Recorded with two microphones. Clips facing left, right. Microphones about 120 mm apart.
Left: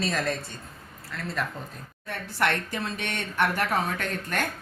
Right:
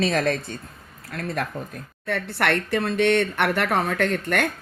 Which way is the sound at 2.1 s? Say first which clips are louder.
Right 4 dB; 70° right (ahead or behind).